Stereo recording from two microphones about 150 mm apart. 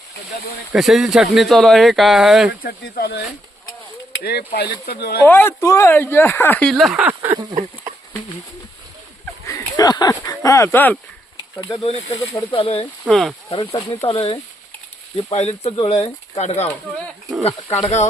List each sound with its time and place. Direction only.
0.7 s speech: centre (ahead or behind)
2.6 s speech: 90° left
5.2 s speech: 15° left (ahead or behind); by 7.3 s 15° right (ahead or behind)
9.5 s a sound: 25° left (ahead or behind)
10.2 s speech: 20° left (ahead or behind)
11.7 s speech: 35° left (ahead or behind)
13.1 s speech: centre (ahead or behind)
14.1 s speech: 35° left (ahead or behind)
17.7 s speech: 45° left (ahead or behind)